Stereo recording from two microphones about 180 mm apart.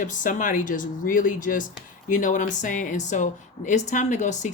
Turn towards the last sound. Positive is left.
turn(degrees=40)  # may be behind; listen again after turning